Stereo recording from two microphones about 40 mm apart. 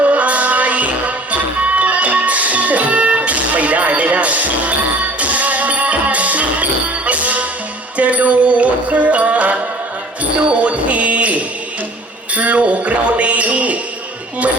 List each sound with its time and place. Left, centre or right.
0.0 s music: right